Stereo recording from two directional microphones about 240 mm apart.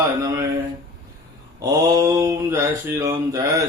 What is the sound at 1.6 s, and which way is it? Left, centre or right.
Mantra, centre.